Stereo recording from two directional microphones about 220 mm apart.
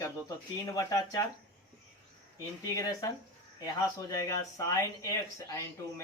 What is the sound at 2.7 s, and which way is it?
Speech, 15° left (ahead or behind).